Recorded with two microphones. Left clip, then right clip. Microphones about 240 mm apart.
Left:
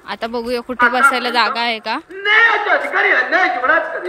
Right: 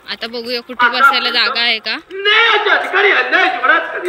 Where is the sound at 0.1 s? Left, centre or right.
Centre.